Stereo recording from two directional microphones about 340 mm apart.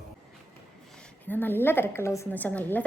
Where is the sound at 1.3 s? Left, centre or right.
Centre.